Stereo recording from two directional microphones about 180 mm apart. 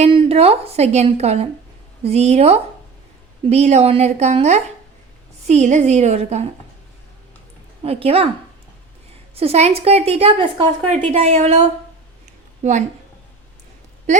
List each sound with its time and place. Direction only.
0.0 s a woman's voice: 30° right (ahead or behind)
7.8 s a woman's voice: 30° right (ahead or behind)
9.3 s a woman's voice: 35° right (ahead or behind)